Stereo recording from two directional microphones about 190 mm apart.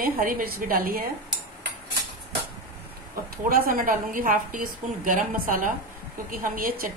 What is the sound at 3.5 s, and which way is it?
A woman's voice, 45° right (ahead or behind).